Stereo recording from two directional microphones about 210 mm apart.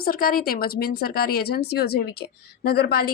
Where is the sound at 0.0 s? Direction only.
45° left (ahead or behind).